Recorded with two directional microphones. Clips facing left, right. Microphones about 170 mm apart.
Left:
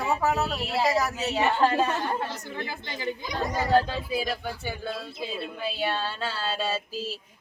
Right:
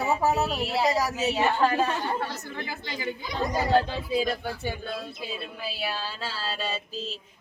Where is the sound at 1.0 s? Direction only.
10° right (ahead or behind).